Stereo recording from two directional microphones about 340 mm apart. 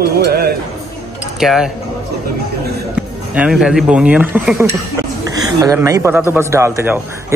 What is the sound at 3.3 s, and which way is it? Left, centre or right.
Speech, centre.